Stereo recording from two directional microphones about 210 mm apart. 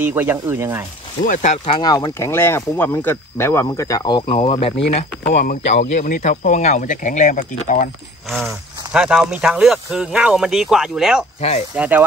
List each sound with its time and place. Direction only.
0.0 s speech: 10° right (ahead or behind)
1.2 s speech: 35° left (ahead or behind)
1.8 s speech: 20° left (ahead or behind)
5.3 s speech: 40° left (ahead or behind)
8.5 s speech: 5° right (ahead or behind)